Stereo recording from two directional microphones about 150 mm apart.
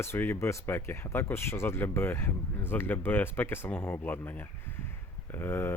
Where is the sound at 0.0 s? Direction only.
15° left (ahead or behind).